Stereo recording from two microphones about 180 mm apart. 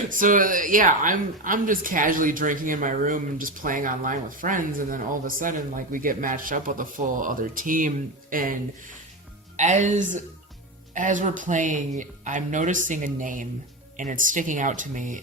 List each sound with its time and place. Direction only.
0.1 s speech: 50° right (ahead or behind)
9.6 s speech: 40° right (ahead or behind)